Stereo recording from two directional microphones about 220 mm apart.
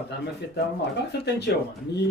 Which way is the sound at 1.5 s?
50° left (ahead or behind).